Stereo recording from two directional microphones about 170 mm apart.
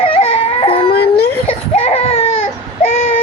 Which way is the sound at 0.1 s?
35° left (ahead or behind).